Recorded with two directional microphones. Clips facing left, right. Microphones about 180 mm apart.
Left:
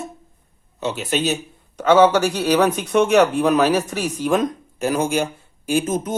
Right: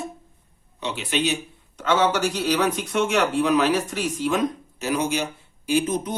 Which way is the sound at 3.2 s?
40° left (ahead or behind).